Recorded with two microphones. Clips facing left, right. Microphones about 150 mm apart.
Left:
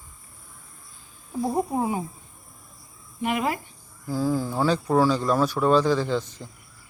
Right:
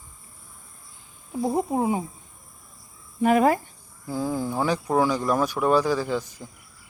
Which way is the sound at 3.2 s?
40° right (ahead or behind).